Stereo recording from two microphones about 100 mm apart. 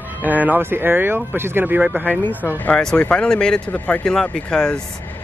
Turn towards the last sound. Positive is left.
turn(degrees=10)  # may be behind; listen again after turning